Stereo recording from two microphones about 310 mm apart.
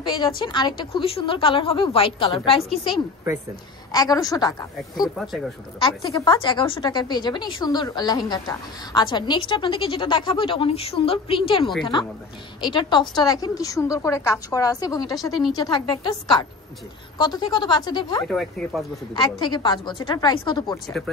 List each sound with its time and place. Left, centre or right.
0.4 s speech: centre
3.9 s speech: centre
5.1 s speech: centre
5.8 s speech: centre
18.2 s speech: centre
19.1 s speech: centre